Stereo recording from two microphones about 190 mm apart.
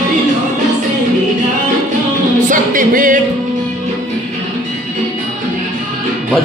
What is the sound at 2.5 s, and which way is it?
Singing, 45° right (ahead or behind).